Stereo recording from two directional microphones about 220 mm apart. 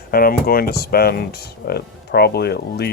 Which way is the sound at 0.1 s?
40° left (ahead or behind).